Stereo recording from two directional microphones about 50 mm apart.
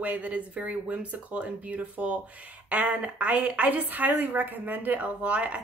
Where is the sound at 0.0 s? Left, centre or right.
Right.